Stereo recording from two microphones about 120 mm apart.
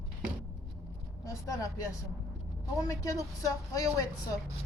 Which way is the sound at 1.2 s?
30° left (ahead or behind).